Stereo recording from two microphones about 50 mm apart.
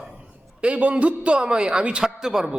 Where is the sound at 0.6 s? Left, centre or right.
Right.